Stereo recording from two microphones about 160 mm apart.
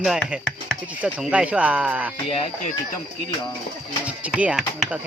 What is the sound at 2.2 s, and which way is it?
Speech, 40° left (ahead or behind).